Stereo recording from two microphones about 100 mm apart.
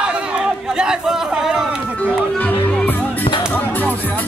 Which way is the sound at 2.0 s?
15° left (ahead or behind).